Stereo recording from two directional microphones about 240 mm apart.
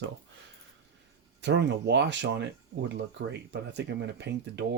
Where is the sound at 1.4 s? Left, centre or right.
Right.